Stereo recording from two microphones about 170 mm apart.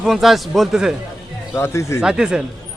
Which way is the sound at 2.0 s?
5° right (ahead or behind).